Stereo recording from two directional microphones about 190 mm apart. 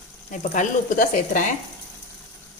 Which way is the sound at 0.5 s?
40° left (ahead or behind).